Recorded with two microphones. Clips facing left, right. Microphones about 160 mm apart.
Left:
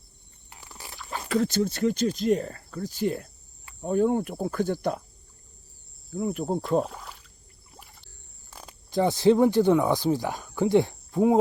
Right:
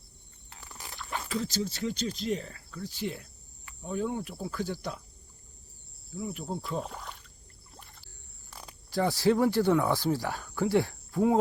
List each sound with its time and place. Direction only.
0.5 s a sound: 10° left (ahead or behind)
1.3 s speech: 55° left (ahead or behind)
6.1 s speech: 50° left (ahead or behind)
6.8 s a sound: centre (ahead or behind)
7.7 s rowboat: 5° left (ahead or behind)
8.4 s speech: 20° left (ahead or behind)